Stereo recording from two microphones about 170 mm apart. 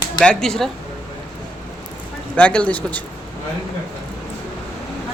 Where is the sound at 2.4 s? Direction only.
5° left (ahead or behind).